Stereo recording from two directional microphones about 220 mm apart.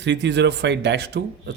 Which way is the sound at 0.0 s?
50° right (ahead or behind).